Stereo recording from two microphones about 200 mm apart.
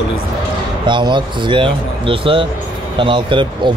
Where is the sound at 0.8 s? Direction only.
25° right (ahead or behind).